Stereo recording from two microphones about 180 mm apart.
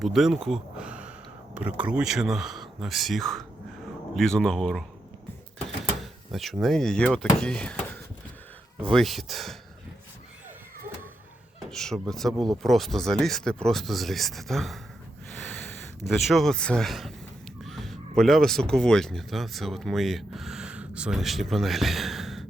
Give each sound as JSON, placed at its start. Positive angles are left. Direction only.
{"t": 0.0, "sound": "speech", "side_deg": 0}
{"t": 5.6, "sound": "door", "side_deg": 0}
{"t": 7.3, "sound": "speech", "side_deg": 5}
{"t": 8.8, "sound": "speech", "side_deg": 0}
{"t": 11.7, "sound": "speech", "side_deg": 5}
{"t": 15.3, "sound": "snort", "side_deg": 5}
{"t": 16.0, "sound": "speech", "side_deg": 0}